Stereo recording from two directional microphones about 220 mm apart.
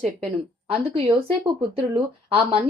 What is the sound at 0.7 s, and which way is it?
Speech, 25° right (ahead or behind).